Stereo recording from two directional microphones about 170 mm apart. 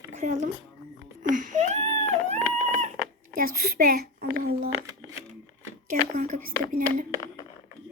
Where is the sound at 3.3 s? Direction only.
55° right (ahead or behind).